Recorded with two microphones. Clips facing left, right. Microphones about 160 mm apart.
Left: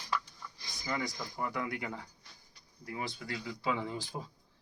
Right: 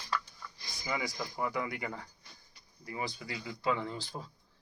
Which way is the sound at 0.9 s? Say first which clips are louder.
Right 1 dB; 5° right (ahead or behind).